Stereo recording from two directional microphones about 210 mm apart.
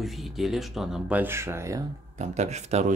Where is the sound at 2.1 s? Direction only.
35° right (ahead or behind).